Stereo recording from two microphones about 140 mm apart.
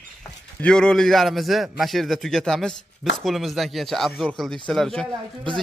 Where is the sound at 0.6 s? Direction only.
5° left (ahead or behind).